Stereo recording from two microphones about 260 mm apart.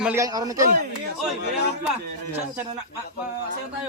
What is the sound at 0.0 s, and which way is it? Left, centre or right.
Speech, centre.